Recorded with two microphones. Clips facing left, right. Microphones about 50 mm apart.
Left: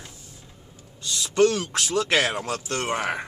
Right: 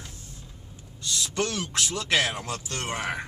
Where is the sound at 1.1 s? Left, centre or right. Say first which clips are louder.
Left 9 dB; centre.